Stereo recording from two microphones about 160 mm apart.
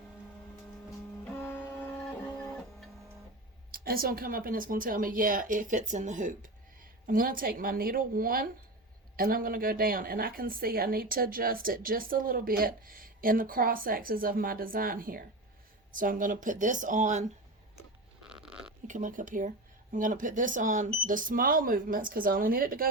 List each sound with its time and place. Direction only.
1.4 s printer: 15° left (ahead or behind)
3.7 s a woman's voice: 65° right (ahead or behind); by 17.2 s 50° right (ahead or behind)
18.2 s stomach rumble: 5° right (ahead or behind)
18.9 s a woman's voice: 55° right (ahead or behind)